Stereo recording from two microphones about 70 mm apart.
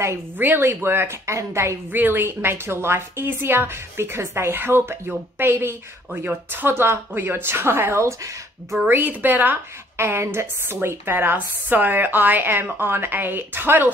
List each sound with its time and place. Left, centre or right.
0.4 s a woman's voice: right
1.9 s a woman's voice: right